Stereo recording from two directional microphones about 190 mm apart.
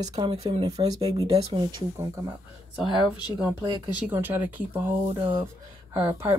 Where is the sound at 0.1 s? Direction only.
30° right (ahead or behind).